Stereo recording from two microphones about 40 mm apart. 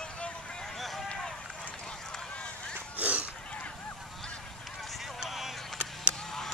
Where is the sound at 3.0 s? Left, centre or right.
Right.